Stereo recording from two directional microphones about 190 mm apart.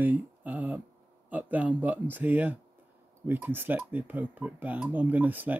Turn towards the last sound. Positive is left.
turn(degrees=-10)  # may be behind; listen again after turning